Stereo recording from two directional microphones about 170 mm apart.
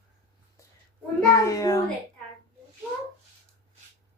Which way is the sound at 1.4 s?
20° left (ahead or behind).